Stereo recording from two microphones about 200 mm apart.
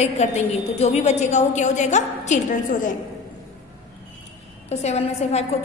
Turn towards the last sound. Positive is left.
turn(degrees=35)  # may be behind; listen again after turning